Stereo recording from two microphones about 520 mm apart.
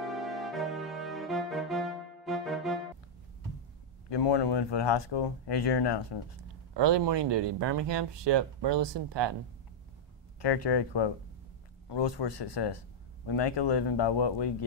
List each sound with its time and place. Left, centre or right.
0.0 s music: centre
4.1 s speech: left
6.7 s speech: right
10.4 s speech: left